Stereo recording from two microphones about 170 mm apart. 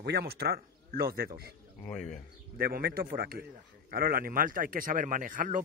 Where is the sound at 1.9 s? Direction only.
5° left (ahead or behind).